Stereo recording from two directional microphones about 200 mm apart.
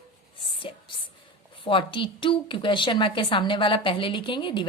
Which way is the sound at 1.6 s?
25° left (ahead or behind).